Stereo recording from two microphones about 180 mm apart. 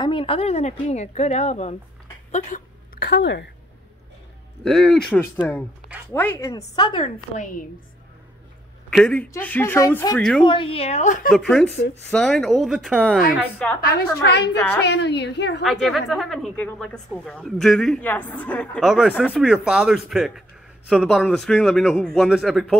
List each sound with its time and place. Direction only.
0.0 s speech: 30° left (ahead or behind); by 2.7 s 45° left (ahead or behind)
3.0 s a woman's voice: 70° left (ahead or behind)
4.6 s a woman's voice: centre (ahead or behind); by 7.2 s 25° left (ahead or behind)
8.9 s speech: 5° left (ahead or behind)
10.1 s a woman's voice: 5° left (ahead or behind)
10.4 s speech: 30° left (ahead or behind); by 11.3 s 45° left (ahead or behind)
11.3 s a woman's voice: centre (ahead or behind)
14.8 s a woman's voice: 70° left (ahead or behind)
15.6 s a woman's voice: centre (ahead or behind)